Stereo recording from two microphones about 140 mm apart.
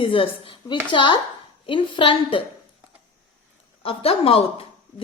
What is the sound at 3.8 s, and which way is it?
Speech, 45° left (ahead or behind).